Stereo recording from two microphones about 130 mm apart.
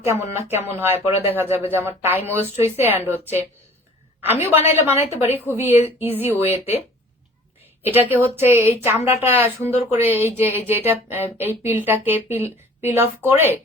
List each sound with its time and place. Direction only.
0.0 s speech: 20° right (ahead or behind)